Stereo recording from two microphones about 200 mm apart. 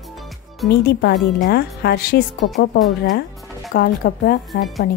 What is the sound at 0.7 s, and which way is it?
A woman's voice, 50° left (ahead or behind).